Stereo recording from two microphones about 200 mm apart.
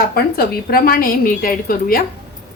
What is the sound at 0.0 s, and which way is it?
A woman's voice, 50° left (ahead or behind).